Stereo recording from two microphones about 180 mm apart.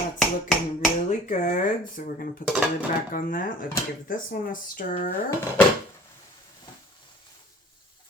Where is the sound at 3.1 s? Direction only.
50° left (ahead or behind).